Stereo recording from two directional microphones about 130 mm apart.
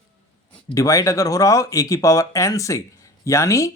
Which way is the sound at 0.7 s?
25° left (ahead or behind).